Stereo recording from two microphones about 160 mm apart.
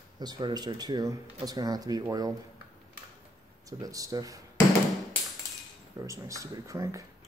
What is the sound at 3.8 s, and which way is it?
Speech, 20° right (ahead or behind).